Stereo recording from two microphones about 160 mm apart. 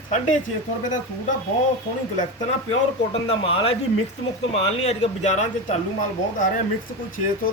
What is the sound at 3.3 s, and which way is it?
Speech, 35° left (ahead or behind).